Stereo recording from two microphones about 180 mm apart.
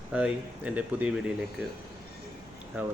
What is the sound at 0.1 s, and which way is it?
Speech, 5° right (ahead or behind).